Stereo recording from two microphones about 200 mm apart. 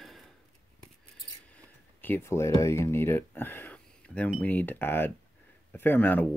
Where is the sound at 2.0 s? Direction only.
10° left (ahead or behind).